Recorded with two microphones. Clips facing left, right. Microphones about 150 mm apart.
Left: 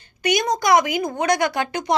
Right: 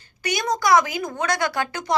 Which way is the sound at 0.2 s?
20° left (ahead or behind).